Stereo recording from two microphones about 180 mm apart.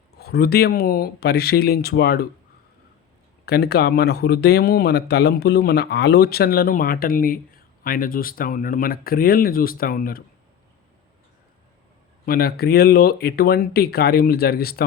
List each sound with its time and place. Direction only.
0.2 s speech: 60° left (ahead or behind)
3.4 s speech: 60° left (ahead or behind)
12.2 s speech: 55° left (ahead or behind)